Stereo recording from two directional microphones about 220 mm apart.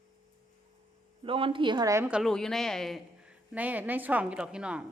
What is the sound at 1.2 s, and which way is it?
A woman's voice, 25° right (ahead or behind).